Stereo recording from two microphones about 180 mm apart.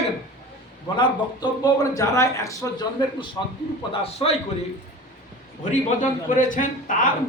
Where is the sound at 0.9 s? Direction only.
20° left (ahead or behind).